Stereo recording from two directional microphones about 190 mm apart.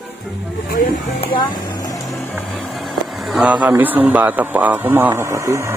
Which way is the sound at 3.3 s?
5° right (ahead or behind).